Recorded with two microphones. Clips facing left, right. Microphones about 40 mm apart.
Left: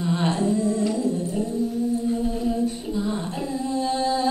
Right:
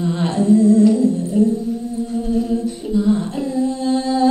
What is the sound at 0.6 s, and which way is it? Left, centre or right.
Humming, left.